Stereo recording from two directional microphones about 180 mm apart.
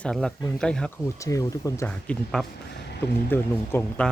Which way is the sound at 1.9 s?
5° left (ahead or behind).